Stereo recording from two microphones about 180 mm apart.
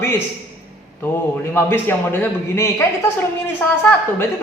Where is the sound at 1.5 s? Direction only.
10° left (ahead or behind).